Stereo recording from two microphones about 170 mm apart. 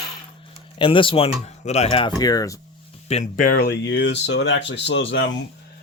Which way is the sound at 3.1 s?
45° left (ahead or behind).